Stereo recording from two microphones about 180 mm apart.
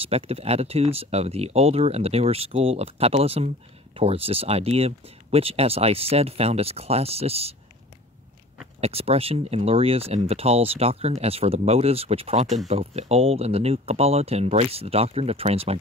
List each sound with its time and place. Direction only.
0.0 s speech: 35° right (ahead or behind)
8.8 s speech: 35° right (ahead or behind)